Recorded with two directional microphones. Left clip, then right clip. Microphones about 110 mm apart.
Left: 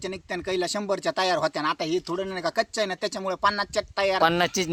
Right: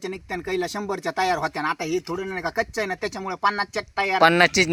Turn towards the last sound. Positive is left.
turn(degrees=-35)  # may be behind; listen again after turning